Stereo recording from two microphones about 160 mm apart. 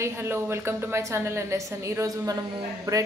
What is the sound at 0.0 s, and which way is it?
A woman's voice, 15° right (ahead or behind).